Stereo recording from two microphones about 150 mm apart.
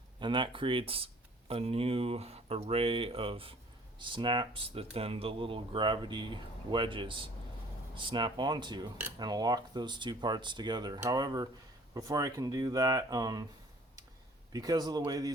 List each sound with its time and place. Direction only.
0.2 s speech: 30° right (ahead or behind)
14.5 s speech: 25° right (ahead or behind)